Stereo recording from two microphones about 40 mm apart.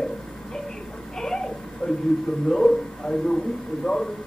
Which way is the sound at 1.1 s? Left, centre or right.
Centre.